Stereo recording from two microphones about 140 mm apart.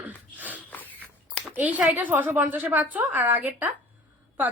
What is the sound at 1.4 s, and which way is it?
Speech, 10° right (ahead or behind).